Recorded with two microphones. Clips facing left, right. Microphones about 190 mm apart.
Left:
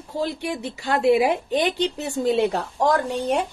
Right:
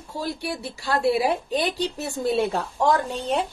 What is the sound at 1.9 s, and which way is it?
A woman's voice, 15° left (ahead or behind).